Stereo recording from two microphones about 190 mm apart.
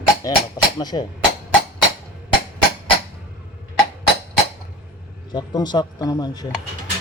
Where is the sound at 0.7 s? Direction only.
20° left (ahead or behind).